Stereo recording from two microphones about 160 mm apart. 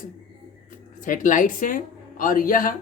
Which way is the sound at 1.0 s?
55° left (ahead or behind).